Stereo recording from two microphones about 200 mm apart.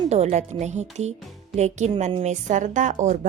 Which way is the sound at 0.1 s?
35° right (ahead or behind).